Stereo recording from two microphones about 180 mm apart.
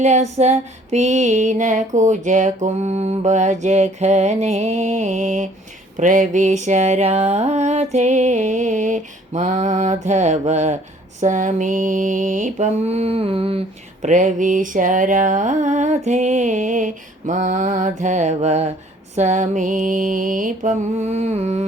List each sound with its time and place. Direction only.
0.0 s female singing: 40° right (ahead or behind)
11.2 s mantra: 45° right (ahead or behind)